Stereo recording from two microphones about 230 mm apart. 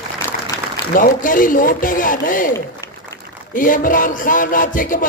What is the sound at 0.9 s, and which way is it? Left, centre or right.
Music, left.